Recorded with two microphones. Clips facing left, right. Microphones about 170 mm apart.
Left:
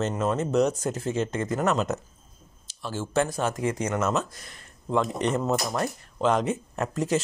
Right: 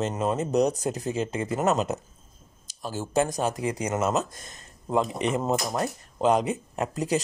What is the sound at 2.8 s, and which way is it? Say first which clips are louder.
Speech: even; 40° right (ahead or behind).